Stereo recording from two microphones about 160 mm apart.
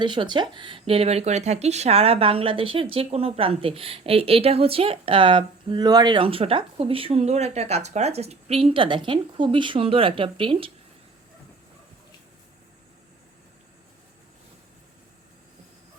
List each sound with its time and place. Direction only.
0.0 s speech: 30° right (ahead or behind)